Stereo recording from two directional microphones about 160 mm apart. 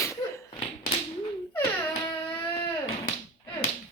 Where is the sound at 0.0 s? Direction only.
15° left (ahead or behind).